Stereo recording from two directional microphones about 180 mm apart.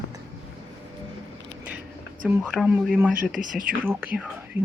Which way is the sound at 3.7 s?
10° right (ahead or behind).